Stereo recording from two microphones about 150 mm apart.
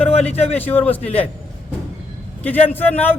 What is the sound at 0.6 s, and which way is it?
Speech, 10° left (ahead or behind).